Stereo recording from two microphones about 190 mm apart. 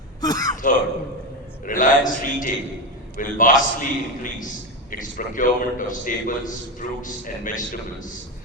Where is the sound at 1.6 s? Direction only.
45° left (ahead or behind).